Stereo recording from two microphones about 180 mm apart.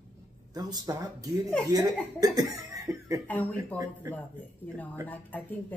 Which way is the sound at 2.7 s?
20° right (ahead or behind).